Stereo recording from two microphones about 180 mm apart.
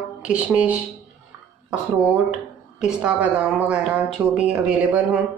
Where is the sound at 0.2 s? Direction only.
5° right (ahead or behind).